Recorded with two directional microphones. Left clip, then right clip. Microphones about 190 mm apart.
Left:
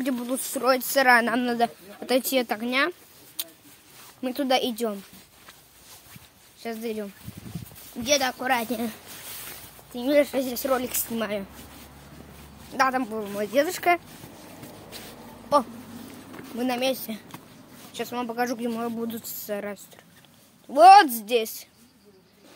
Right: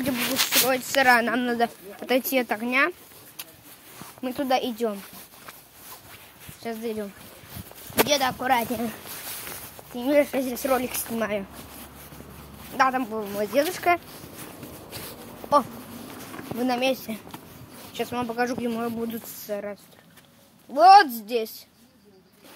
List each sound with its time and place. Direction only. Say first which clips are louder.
0.7 s speech: left 3 dB; 15° left (ahead or behind)
4.2 s speech: left 1 dB; 20° left (ahead or behind)
6.6 s speech: right 1 dB; 10° left (ahead or behind)
8.1 s speech: left 2 dB; 5° left (ahead or behind)
9.9 s speech: even; 10° left (ahead or behind)
12.7 s speech: right 1 dB; 10° left (ahead or behind)
16.5 s speech: right 2 dB; 5° left (ahead or behind)
19.5 s a woman's voice: even; 45° left (ahead or behind)